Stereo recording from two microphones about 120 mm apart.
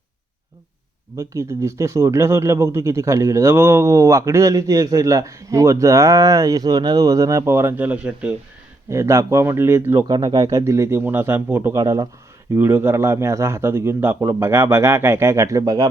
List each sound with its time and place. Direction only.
1.1 s speech: 25° right (ahead or behind); by 8.4 s 10° right (ahead or behind)
8.9 s speech: 25° right (ahead or behind)
10.1 s speech: 35° right (ahead or behind)
10.6 s speech: 25° right (ahead or behind)